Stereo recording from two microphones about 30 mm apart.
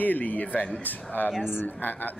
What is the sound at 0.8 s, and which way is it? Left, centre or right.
Speech, left.